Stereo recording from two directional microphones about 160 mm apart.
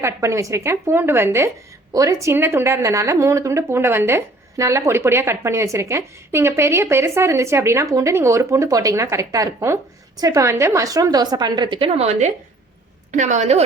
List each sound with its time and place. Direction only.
0.0 s a woman's voice: 20° right (ahead or behind); by 13.6 s 50° right (ahead or behind)